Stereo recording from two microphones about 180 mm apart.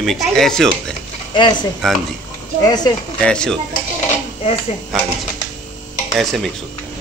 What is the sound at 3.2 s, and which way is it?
Speech, 5° left (ahead or behind).